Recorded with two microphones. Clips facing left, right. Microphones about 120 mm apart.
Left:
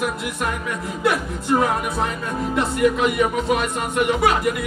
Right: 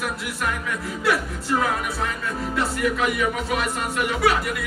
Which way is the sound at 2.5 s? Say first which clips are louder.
Left 5 dB; 20° left (ahead or behind).